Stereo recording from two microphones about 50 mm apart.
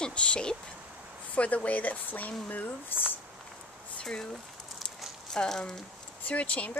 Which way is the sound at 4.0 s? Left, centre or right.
Centre.